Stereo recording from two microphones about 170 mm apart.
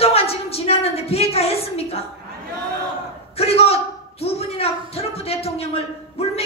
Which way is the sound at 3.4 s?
35° left (ahead or behind).